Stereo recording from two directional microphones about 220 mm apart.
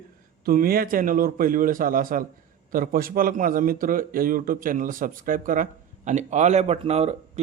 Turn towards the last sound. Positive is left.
turn(degrees=-30)  # may be behind; listen again after turning